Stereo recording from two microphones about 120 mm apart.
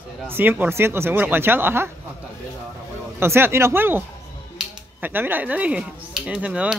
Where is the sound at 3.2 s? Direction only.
20° right (ahead or behind).